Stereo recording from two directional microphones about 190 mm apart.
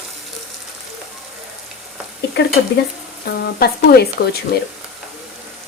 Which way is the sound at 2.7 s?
65° left (ahead or behind).